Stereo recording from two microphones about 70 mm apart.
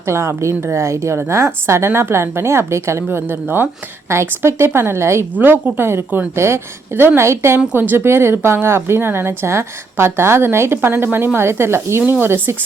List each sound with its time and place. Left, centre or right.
0.0 s speech: right
5.4 s a woman's voice: right
7.7 s speech: right